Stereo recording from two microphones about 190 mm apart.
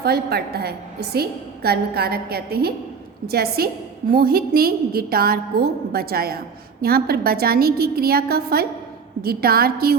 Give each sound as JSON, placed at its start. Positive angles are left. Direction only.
{"t": 0.0, "sound": "a woman's voice", "side_deg": -55}